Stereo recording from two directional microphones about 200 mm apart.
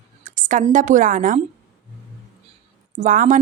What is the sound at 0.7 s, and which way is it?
Speech, 40° right (ahead or behind).